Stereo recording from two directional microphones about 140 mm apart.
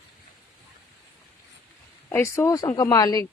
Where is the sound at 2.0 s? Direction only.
15° left (ahead or behind).